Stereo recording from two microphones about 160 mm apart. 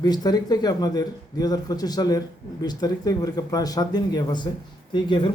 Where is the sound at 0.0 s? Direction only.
25° left (ahead or behind).